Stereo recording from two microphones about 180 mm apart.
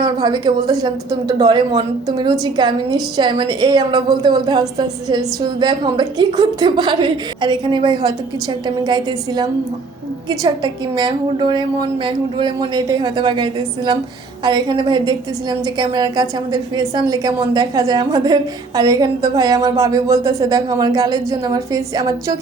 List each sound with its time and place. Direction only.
0.0 s a woman's voice: 25° right (ahead or behind)